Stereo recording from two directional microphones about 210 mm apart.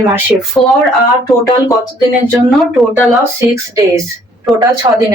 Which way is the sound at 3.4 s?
15° right (ahead or behind).